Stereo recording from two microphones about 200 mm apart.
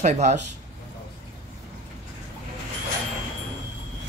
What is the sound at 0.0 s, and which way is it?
Speech, 35° right (ahead or behind).